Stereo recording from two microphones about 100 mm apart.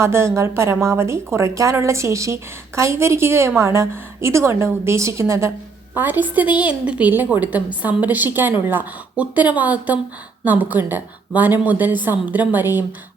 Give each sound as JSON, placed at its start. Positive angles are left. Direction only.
{"t": 0.0, "sound": "a woman's voice", "side_deg": -30}